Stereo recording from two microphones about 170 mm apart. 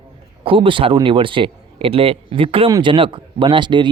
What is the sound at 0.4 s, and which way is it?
Speech, 30° right (ahead or behind).